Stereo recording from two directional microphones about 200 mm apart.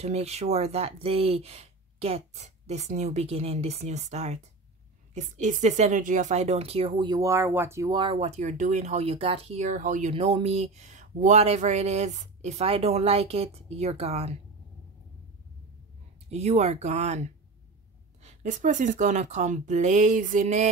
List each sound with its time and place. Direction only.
0.0 s a woman's voice: 30° right (ahead or behind)
16.3 s a woman's voice: 30° right (ahead or behind)